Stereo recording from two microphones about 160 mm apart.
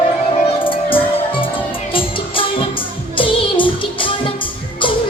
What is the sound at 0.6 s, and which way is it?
Music, 35° left (ahead or behind).